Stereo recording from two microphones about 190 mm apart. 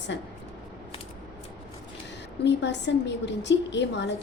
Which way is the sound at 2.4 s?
65° left (ahead or behind).